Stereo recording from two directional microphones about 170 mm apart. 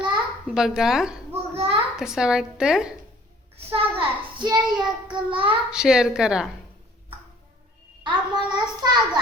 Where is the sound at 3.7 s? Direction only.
30° right (ahead or behind).